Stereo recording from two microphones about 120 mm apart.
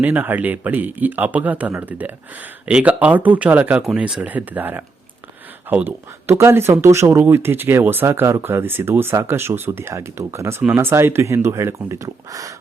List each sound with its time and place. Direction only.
0.0 s speech: 15° right (ahead or behind)